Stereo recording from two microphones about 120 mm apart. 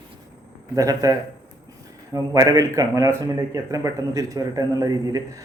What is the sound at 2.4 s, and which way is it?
A man's voice, 30° right (ahead or behind).